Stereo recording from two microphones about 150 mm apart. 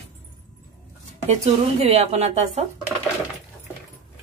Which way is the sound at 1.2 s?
45° right (ahead or behind).